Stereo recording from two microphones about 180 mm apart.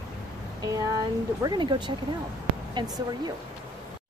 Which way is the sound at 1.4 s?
25° right (ahead or behind).